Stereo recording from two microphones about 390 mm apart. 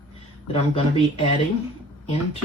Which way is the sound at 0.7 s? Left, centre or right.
Centre.